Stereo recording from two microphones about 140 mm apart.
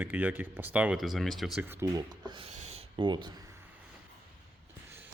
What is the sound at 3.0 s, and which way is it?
Speech, 35° right (ahead or behind).